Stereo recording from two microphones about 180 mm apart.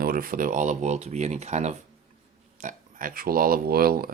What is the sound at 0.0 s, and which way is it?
Speech, 55° right (ahead or behind).